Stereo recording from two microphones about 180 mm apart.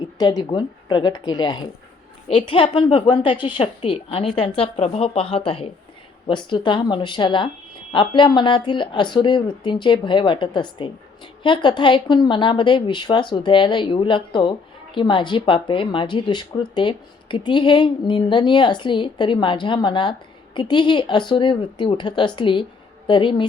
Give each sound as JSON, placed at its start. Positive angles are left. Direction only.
{"t": 0.2, "sound": "a woman's voice", "side_deg": 25}